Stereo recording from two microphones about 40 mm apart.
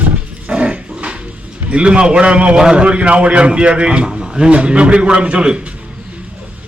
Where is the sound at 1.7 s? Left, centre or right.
Right.